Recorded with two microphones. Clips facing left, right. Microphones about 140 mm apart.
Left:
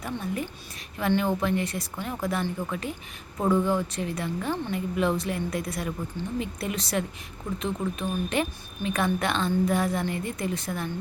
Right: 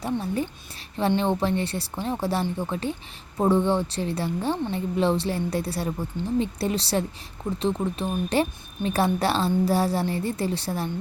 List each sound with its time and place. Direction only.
0.0 s a woman's voice: 30° right (ahead or behind)